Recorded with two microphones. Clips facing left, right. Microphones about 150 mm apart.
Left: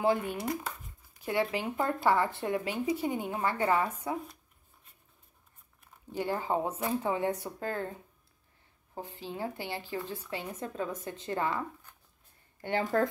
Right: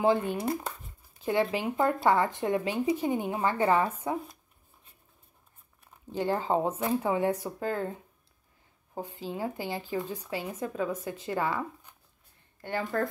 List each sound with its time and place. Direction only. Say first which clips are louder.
0.0 s speech: right 3 dB; 20° right (ahead or behind)
6.1 s speech: right 3 dB; 20° right (ahead or behind)
8.9 s speech: right 4 dB; 15° right (ahead or behind)
12.6 s a woman's voice: left 2 dB; 20° left (ahead or behind)